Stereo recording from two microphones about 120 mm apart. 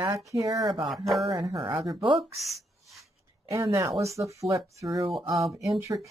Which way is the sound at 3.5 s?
25° right (ahead or behind).